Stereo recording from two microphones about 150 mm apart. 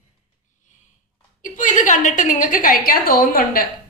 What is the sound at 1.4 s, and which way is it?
A woman's voice, 60° left (ahead or behind).